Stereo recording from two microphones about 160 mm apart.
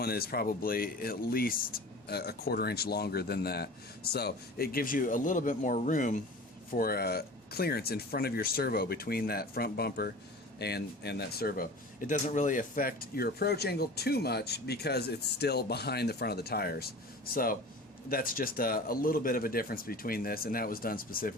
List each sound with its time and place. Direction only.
0.0 s speech: 75° left (ahead or behind); by 6.1 s 50° left (ahead or behind)
6.7 s speech: 65° left (ahead or behind)
10.6 s speech: 90° left; by 21.3 s 65° left (ahead or behind)